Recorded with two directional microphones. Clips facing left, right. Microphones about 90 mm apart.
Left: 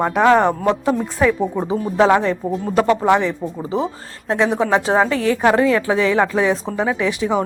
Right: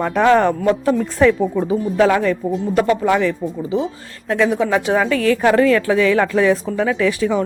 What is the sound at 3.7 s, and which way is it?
Speech, 35° left (ahead or behind).